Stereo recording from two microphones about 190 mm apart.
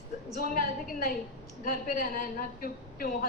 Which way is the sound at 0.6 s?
50° left (ahead or behind).